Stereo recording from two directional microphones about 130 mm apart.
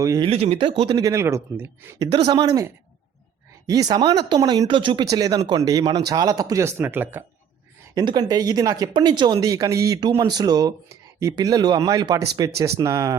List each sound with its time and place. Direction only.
0.2 s speech: 50° right (ahead or behind)
0.9 s speech: 25° right (ahead or behind)
2.0 s speech: 35° right (ahead or behind)
3.7 s speech: 30° right (ahead or behind)
5.0 s speech: 30° right (ahead or behind)
7.9 s speech: 30° right (ahead or behind)